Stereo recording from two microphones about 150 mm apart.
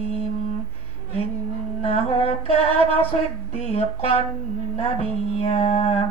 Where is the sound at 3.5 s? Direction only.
40° left (ahead or behind).